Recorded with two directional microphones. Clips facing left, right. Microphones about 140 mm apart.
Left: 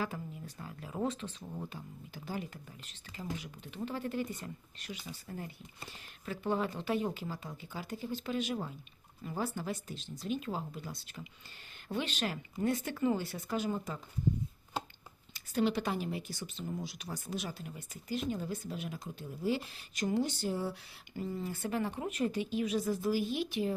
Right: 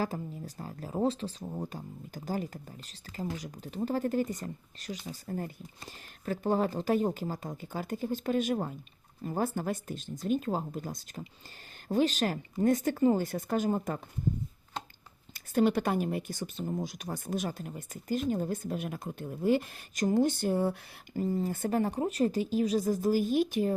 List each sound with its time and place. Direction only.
0.0 s speech: 40° right (ahead or behind)
15.3 s speech: 50° right (ahead or behind)